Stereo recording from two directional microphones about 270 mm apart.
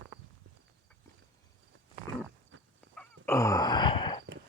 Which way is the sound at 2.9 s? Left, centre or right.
Centre.